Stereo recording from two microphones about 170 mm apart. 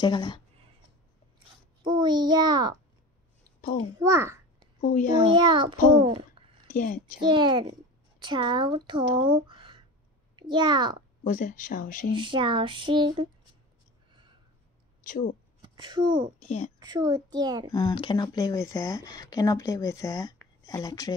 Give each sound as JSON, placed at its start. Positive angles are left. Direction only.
{"t": 0.0, "sound": "speech", "side_deg": 25}
{"t": 1.8, "sound": "a child's voice", "side_deg": -25}
{"t": 4.0, "sound": "a sound", "side_deg": -15}
{"t": 5.2, "sound": "speech", "side_deg": -30}
{"t": 6.7, "sound": "a woman's voice", "side_deg": 55}
{"t": 7.2, "sound": "a child's voice", "side_deg": -25}
{"t": 11.2, "sound": "speech", "side_deg": 50}
{"t": 12.2, "sound": "speech", "side_deg": -30}
{"t": 15.6, "sound": "speech", "side_deg": -25}
{"t": 16.3, "sound": "a woman's voice", "side_deg": 40}
{"t": 16.8, "sound": "speech", "side_deg": -25}
{"t": 17.7, "sound": "speech", "side_deg": 25}